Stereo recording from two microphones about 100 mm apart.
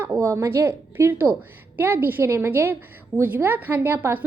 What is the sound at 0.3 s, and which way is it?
A woman's voice, 25° right (ahead or behind).